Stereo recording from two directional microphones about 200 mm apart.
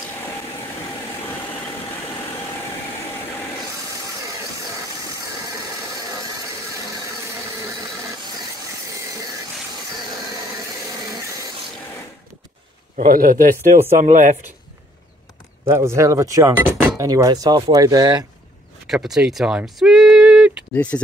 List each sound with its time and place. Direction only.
12.9 s a man's voice: 45° right (ahead or behind)
15.7 s speech: 15° right (ahead or behind)
18.9 s speech: centre (ahead or behind)
20.7 s speech: 5° left (ahead or behind)